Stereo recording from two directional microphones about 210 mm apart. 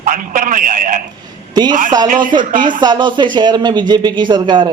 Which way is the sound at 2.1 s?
40° right (ahead or behind).